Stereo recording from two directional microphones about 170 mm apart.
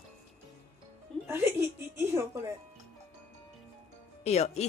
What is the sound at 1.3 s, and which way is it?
Chuckle, 15° right (ahead or behind).